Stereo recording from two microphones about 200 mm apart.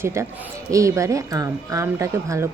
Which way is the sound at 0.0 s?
15° right (ahead or behind).